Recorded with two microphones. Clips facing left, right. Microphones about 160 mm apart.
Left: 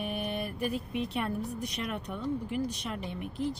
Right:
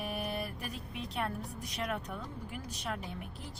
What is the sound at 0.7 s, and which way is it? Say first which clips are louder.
Speech: left 9 dB; 65° left (ahead or behind).